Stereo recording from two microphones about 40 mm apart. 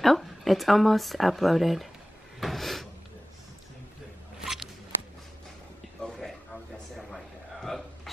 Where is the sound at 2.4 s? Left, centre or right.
Centre.